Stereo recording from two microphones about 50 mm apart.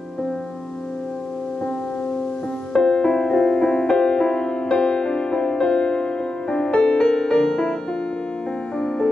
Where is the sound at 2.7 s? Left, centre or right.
Centre.